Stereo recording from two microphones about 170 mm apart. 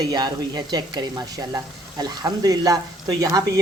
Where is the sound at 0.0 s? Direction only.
25° right (ahead or behind).